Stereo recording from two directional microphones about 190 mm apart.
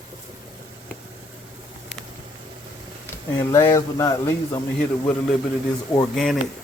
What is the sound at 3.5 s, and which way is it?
Speech, 15° left (ahead or behind).